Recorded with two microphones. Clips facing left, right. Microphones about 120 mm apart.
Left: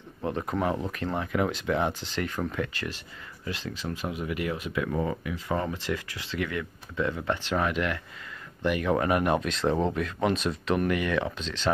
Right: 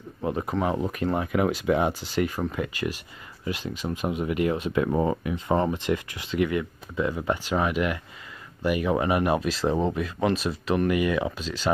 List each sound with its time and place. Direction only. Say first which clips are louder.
0.2 s speech: right 2 dB; 10° right (ahead or behind)